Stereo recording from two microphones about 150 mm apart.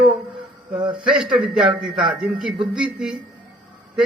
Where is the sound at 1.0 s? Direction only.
5° right (ahead or behind).